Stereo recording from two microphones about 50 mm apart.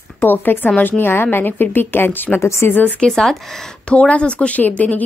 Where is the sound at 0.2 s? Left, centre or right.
Left.